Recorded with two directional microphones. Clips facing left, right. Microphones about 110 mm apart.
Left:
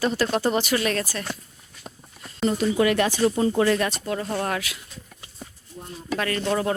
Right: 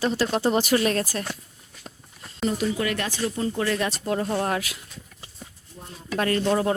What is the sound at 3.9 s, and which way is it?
Speech, 30° right (ahead or behind).